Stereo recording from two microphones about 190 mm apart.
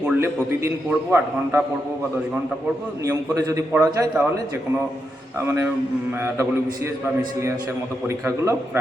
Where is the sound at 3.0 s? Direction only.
15° right (ahead or behind).